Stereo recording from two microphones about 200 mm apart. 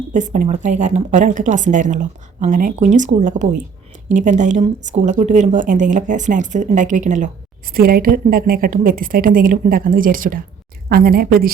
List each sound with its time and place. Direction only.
0.1 s a woman's voice: 40° right (ahead or behind)